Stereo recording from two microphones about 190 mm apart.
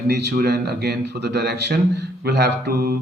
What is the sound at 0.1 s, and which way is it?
A man's voice, 60° right (ahead or behind).